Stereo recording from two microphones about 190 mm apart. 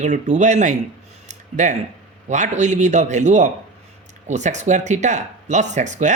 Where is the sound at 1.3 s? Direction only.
40° right (ahead or behind).